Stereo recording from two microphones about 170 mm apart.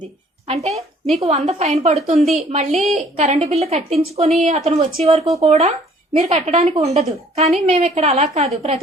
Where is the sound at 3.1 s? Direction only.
40° right (ahead or behind).